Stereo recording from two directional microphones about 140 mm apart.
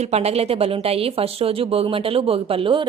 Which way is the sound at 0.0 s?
50° right (ahead or behind).